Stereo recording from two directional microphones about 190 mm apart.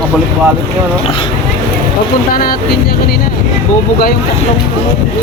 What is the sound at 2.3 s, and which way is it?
Speech, 50° left (ahead or behind).